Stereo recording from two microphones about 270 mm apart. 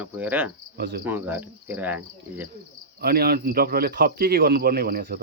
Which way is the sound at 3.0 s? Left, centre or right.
Right.